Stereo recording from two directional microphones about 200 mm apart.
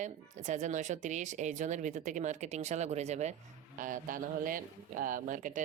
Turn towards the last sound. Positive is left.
turn(degrees=-40)  # may be behind; listen again after turning